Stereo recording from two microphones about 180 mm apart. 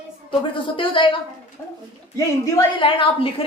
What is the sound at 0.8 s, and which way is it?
Speech, 30° left (ahead or behind).